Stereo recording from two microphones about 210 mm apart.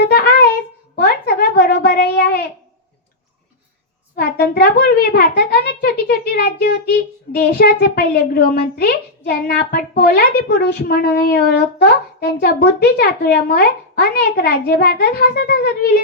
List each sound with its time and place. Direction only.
0.0 s a sound: 50° left (ahead or behind)
0.9 s babbling: 45° left (ahead or behind)
4.1 s a child's voice: 45° left (ahead or behind)